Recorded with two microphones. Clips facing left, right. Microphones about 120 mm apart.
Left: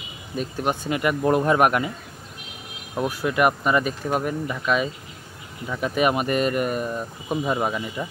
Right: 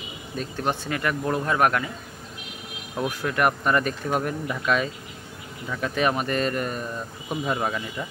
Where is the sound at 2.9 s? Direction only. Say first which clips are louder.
Left 3 dB; 10° left (ahead or behind).